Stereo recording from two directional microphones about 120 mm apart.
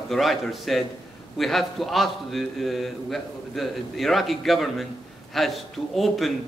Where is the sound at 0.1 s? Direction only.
Centre (ahead or behind).